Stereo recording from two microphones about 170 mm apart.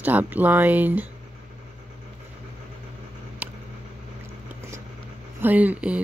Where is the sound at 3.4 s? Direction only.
10° right (ahead or behind).